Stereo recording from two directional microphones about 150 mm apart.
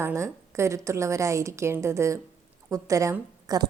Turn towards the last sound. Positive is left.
turn(degrees=-25)  # may be behind; listen again after turning